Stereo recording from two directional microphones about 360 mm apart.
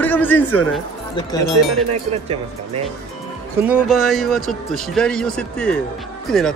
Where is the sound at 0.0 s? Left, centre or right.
Centre.